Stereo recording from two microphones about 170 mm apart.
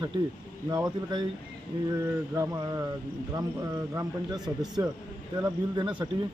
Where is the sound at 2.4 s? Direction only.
20° right (ahead or behind).